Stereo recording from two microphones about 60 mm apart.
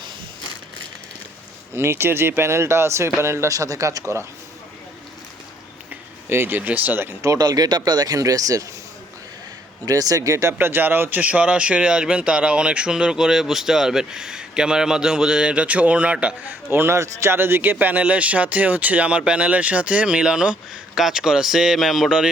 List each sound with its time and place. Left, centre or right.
1.7 s speech: right
3.5 s speech: right
6.2 s speech: right
6.6 s a man's voice: right
7.2 s speech: right
9.8 s speech: right
10.6 s speech: right
11.2 s speech: right
16.5 s a man's voice: right; by 22.1 s centre